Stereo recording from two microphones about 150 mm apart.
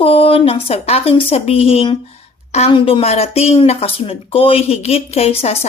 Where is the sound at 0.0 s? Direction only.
40° left (ahead or behind).